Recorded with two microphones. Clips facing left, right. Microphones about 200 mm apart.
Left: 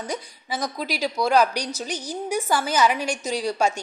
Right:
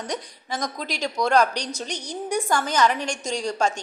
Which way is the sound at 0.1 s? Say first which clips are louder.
Even; 5° left (ahead or behind).